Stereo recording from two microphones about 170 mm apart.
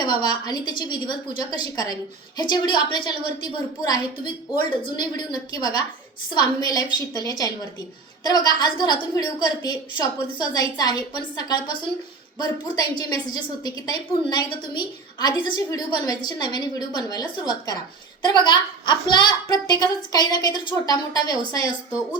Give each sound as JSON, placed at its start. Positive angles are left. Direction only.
{"t": 0.0, "sound": "a woman's voice", "side_deg": 25}